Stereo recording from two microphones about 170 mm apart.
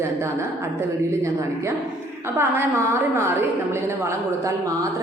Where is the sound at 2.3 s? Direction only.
15° right (ahead or behind).